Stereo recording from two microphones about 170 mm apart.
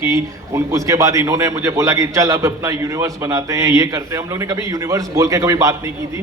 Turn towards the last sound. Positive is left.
turn(degrees=-20)  # may be behind; listen again after turning